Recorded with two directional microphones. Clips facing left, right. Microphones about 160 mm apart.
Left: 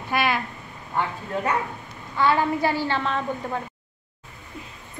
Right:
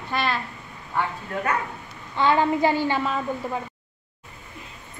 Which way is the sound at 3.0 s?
5° right (ahead or behind).